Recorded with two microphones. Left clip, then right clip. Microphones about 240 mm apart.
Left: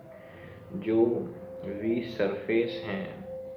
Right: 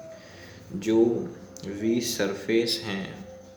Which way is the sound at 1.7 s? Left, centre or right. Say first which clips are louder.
Right 4 dB; right.